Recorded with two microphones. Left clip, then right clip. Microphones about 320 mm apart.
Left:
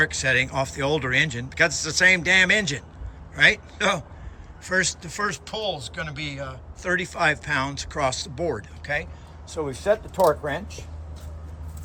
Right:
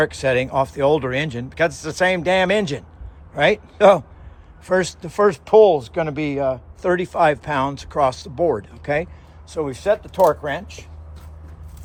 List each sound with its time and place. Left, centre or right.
0.0 s speech: centre; by 10.8 s right